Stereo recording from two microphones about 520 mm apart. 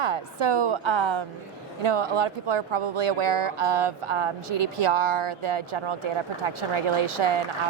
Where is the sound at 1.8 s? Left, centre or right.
Right.